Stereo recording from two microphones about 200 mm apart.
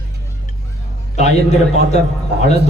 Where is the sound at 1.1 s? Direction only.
35° left (ahead or behind).